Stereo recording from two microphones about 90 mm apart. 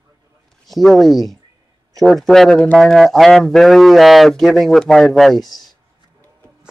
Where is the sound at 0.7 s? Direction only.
5° left (ahead or behind).